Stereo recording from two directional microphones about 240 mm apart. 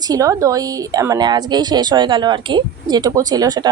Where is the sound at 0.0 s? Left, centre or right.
Centre.